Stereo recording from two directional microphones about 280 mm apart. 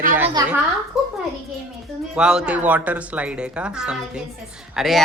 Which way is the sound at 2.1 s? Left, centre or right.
Centre.